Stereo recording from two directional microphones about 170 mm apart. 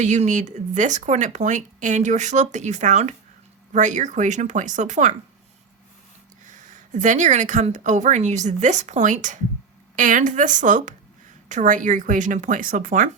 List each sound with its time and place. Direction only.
0.0 s speech: 45° right (ahead or behind)
6.4 s speech: 50° right (ahead or behind)